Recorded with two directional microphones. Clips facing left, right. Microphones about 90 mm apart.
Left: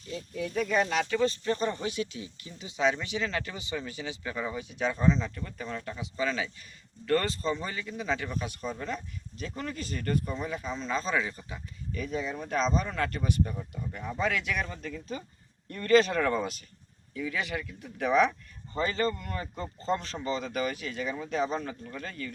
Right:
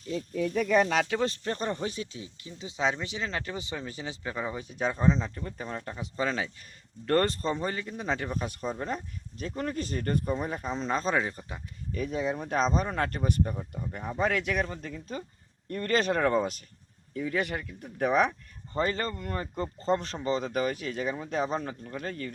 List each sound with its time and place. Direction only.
1.1 s speech: 70° right (ahead or behind)
1.5 s speech: 45° right (ahead or behind)
13.6 s speech: 35° right (ahead or behind)